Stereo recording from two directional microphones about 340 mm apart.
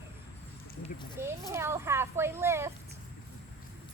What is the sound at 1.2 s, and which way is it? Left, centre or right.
A woman's voice, centre.